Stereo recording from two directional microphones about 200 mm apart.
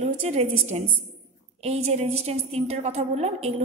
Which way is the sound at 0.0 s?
30° right (ahead or behind).